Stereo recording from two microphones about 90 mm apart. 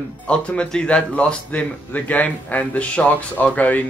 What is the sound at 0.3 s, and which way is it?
A man's voice, 10° left (ahead or behind).